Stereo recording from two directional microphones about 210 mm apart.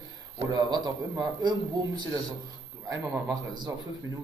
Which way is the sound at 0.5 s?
20° right (ahead or behind).